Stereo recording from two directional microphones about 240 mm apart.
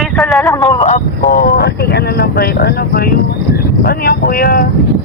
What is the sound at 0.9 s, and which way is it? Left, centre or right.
Speech, left.